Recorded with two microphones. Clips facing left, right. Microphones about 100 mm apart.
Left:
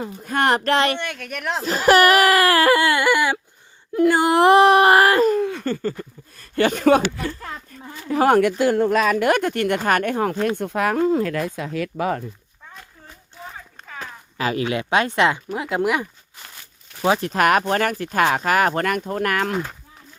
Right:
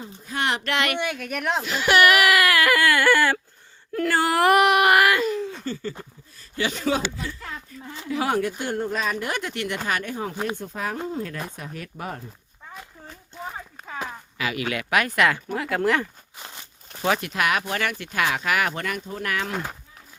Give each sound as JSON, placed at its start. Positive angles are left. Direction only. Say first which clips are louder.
{"t": 0.0, "sound": "speech", "louder": "left 7 dB", "side_deg": 60}
{"t": 0.9, "sound": "speech", "louder": "right 2 dB", "side_deg": -5}
{"t": 1.6, "sound": "speech", "louder": "left 5 dB", "side_deg": 40}
{"t": 5.4, "sound": "a sound", "louder": "left 7 dB", "side_deg": 60}
{"t": 6.0, "sound": "speech", "louder": "left 6 dB", "side_deg": 55}
{"t": 7.7, "sound": "a sound", "louder": "even", "side_deg": 50}
{"t": 8.0, "sound": "speech", "louder": "left 8 dB", "side_deg": 50}
{"t": 8.4, "sound": "speech", "louder": "left 9 dB", "side_deg": 85}
{"t": 9.4, "sound": "speech", "louder": "left 8 dB", "side_deg": 50}
{"t": 13.8, "sound": "a sound", "louder": "right 3 dB", "side_deg": -15}
{"t": 14.3, "sound": "speech", "louder": "left 5 dB", "side_deg": 35}
{"t": 16.4, "sound": "crumpling", "louder": "right 2 dB", "side_deg": -20}
{"t": 17.2, "sound": "speech", "louder": "left 7 dB", "side_deg": 40}